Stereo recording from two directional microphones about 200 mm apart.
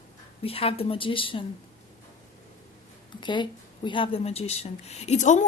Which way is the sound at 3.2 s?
25° left (ahead or behind).